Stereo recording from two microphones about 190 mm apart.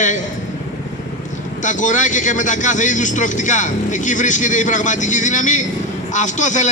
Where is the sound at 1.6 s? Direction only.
40° left (ahead or behind).